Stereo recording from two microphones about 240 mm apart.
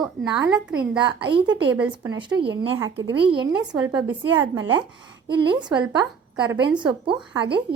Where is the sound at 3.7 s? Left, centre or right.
Centre.